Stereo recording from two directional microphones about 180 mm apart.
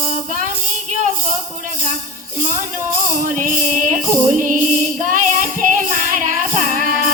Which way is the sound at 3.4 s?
45° right (ahead or behind).